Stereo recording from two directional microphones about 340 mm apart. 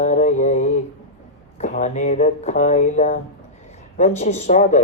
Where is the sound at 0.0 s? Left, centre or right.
Left.